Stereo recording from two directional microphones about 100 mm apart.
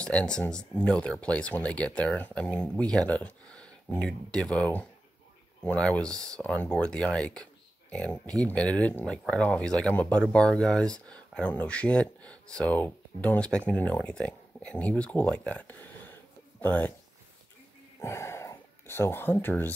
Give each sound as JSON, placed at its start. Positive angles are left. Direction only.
{"t": 0.0, "sound": "speech", "side_deg": 10}
{"t": 18.0, "sound": "speech", "side_deg": 25}